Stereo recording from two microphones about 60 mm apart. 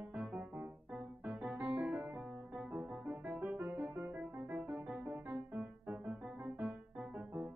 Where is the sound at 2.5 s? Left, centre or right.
Right.